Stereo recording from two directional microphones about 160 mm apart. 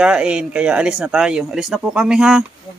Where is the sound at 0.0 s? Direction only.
5° right (ahead or behind).